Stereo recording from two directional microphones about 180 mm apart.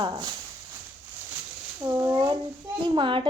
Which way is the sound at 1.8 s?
15° right (ahead or behind).